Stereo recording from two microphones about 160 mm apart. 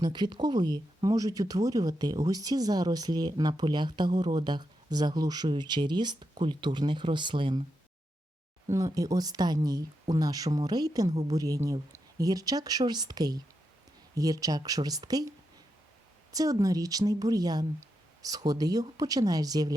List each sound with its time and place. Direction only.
0.0 s speech: 25° right (ahead or behind)
8.7 s speech: 20° right (ahead or behind)
16.3 s speech: 20° right (ahead or behind)